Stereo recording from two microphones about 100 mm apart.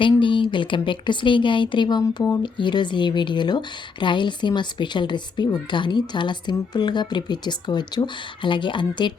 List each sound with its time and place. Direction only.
0.0 s speech: 55° left (ahead or behind); by 2.4 s 40° left (ahead or behind)
2.4 s a woman's voice: 50° left (ahead or behind)